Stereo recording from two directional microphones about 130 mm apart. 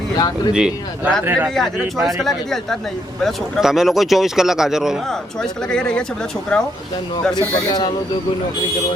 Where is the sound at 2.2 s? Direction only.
Centre (ahead or behind).